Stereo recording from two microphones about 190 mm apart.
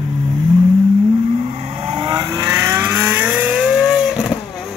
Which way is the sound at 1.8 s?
25° right (ahead or behind).